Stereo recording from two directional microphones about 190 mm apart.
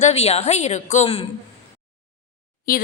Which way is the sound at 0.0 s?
35° left (ahead or behind).